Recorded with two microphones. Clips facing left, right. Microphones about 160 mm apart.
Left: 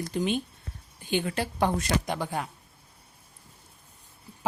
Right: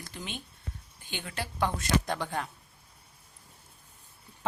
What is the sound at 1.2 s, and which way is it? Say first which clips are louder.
Speech: right 1 dB; 40° left (ahead or behind).